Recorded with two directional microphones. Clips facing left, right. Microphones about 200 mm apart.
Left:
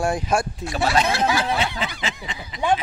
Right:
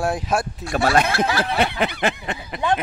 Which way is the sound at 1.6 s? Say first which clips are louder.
Right 5 dB; 60° right (ahead or behind).